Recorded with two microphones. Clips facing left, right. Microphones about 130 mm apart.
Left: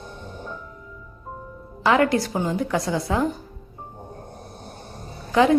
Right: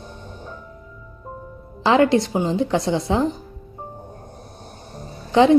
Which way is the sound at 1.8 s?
25° right (ahead or behind).